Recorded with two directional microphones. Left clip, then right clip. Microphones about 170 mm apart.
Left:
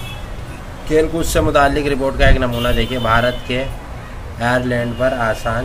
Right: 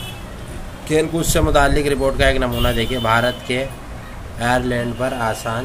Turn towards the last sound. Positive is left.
turn(degrees=-15)  # may be behind; listen again after turning